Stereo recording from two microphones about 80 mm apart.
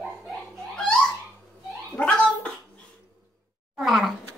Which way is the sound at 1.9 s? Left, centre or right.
Centre.